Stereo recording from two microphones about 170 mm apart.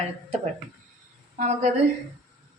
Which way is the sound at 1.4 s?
40° right (ahead or behind).